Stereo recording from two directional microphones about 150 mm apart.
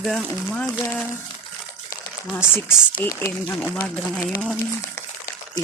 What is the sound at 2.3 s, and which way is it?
Speech, 15° left (ahead or behind).